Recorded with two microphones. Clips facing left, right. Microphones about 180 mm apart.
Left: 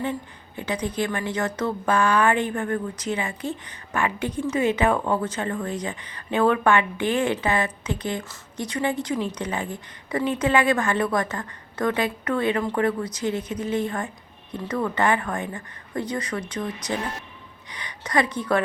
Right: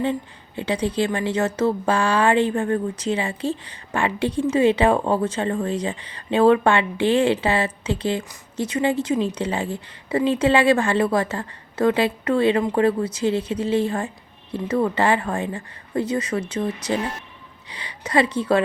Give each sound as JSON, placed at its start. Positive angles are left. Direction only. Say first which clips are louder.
{"t": 0.0, "sound": "a woman's voice", "louder": "right 5 dB", "side_deg": -25}